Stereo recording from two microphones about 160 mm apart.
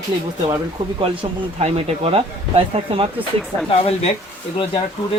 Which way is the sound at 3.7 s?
40° left (ahead or behind).